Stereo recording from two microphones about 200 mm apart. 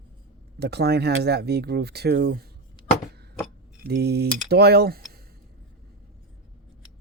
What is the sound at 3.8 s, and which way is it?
Speech, 55° right (ahead or behind).